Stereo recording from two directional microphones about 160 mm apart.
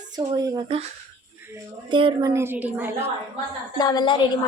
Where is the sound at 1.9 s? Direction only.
30° right (ahead or behind).